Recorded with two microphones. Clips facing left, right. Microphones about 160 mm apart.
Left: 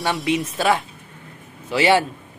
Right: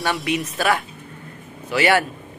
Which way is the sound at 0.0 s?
25° left (ahead or behind).